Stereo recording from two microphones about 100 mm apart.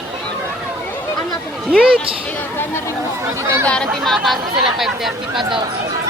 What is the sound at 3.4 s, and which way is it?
Speech, 25° right (ahead or behind).